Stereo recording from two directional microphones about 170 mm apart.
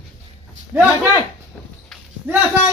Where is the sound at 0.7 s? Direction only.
15° right (ahead or behind).